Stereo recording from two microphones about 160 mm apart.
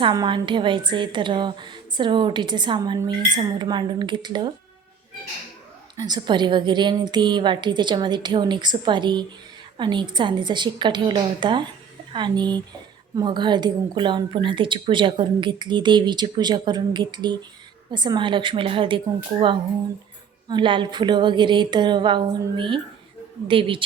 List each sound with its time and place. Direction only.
0.0 s a woman's voice: 30° right (ahead or behind)
6.0 s a woman's voice: 25° right (ahead or behind)